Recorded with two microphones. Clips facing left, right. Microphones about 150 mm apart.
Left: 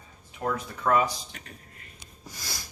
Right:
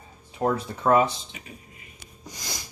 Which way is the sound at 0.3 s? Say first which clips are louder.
Right 5 dB; 30° right (ahead or behind).